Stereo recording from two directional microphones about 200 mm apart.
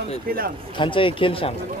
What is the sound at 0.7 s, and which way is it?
Speech, 25° left (ahead or behind).